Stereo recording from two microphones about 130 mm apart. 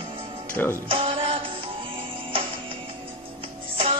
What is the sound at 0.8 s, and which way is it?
Music, 40° right (ahead or behind).